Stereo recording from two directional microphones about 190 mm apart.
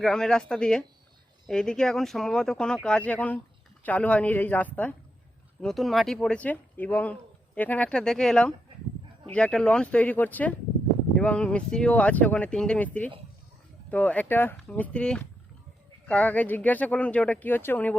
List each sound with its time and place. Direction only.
0.0 s speech: 5° left (ahead or behind)